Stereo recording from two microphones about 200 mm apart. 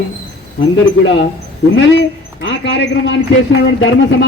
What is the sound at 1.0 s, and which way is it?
A man's voice, 60° left (ahead or behind).